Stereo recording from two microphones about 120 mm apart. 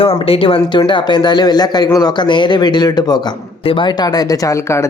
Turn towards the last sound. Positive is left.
turn(degrees=25)  # may be behind; listen again after turning